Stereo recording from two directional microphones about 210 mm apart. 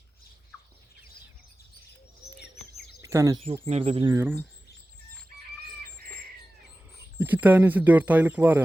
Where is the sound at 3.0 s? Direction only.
15° right (ahead or behind).